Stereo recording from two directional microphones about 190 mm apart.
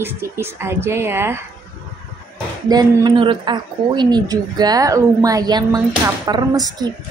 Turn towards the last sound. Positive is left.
turn(degrees=-20)  # may be behind; listen again after turning